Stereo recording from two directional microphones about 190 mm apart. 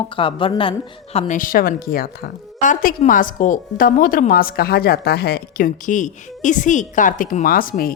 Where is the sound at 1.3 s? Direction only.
45° left (ahead or behind).